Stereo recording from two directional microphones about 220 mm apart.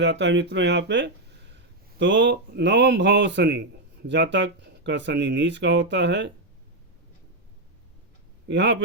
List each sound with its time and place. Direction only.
0.0 s speech: 55° right (ahead or behind)
8.4 s speech: 55° right (ahead or behind)